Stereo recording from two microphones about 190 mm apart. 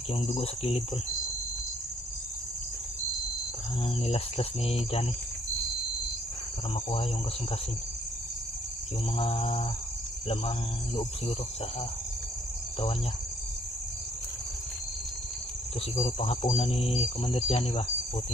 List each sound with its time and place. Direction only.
0.1 s speech: 30° left (ahead or behind)
4.0 s speech: 30° left (ahead or behind)
6.7 s speech: 30° left (ahead or behind)
9.1 s speech: 30° left (ahead or behind)
16.0 s speech: 35° left (ahead or behind)